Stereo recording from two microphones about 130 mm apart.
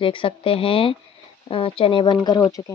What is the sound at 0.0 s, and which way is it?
Speech, 40° left (ahead or behind).